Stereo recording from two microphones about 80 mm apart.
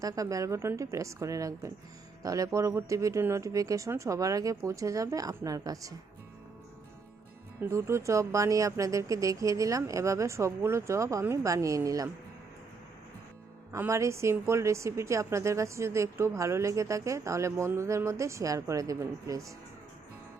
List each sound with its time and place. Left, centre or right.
0.0 s speech: right
7.7 s speech: right
13.7 s speech: right